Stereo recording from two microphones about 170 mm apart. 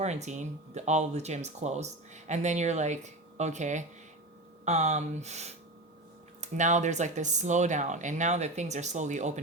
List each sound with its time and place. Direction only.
0.0 s speech: 40° right (ahead or behind)